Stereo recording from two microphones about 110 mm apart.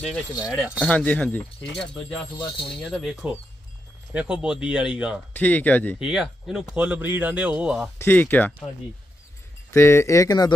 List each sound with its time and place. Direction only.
0.7 s speech: 10° left (ahead or behind)
4.1 s a man's voice: 10° right (ahead or behind)
5.3 s speech: 15° left (ahead or behind)
5.9 s a man's voice: 5° right (ahead or behind)
8.0 s speech: 15° left (ahead or behind)
9.7 s speech: 25° left (ahead or behind)